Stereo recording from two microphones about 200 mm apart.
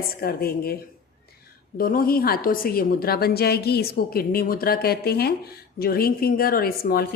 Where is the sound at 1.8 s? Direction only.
45° left (ahead or behind).